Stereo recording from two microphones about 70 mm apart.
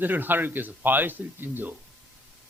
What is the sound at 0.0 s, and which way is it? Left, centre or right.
A man's voice, right.